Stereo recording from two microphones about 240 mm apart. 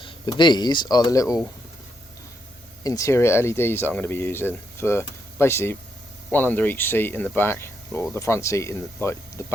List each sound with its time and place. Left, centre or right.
0.0 s speech: centre
2.8 s speech: centre